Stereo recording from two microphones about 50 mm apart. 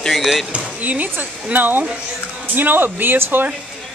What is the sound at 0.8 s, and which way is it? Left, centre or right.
Speech, right.